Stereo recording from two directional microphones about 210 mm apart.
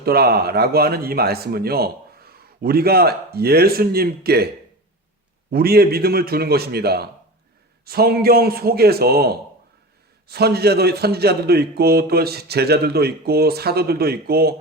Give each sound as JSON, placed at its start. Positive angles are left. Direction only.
{"t": 0.0, "sound": "speech", "side_deg": -50}
{"t": 5.5, "sound": "speech", "side_deg": -45}